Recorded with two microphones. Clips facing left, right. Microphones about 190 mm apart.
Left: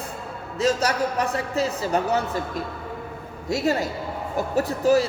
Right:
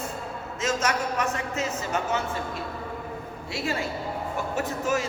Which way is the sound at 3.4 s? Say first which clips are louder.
Left 7 dB; 40° left (ahead or behind).